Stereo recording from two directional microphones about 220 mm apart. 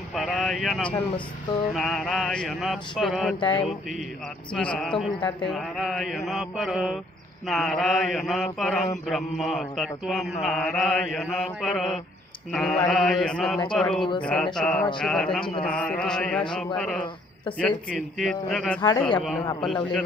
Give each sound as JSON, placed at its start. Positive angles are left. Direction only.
{"t": 0.1, "sound": "a sound", "side_deg": 0}
{"t": 1.8, "sound": "speech", "side_deg": 0}
{"t": 4.6, "sound": "speech", "side_deg": 5}
{"t": 18.8, "sound": "a man's voice", "side_deg": 20}
{"t": 19.1, "sound": "speech", "side_deg": 5}